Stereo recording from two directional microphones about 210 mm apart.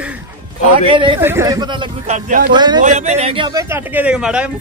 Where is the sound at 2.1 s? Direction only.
35° right (ahead or behind).